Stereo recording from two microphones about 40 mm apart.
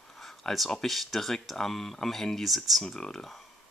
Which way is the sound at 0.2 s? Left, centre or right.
Centre.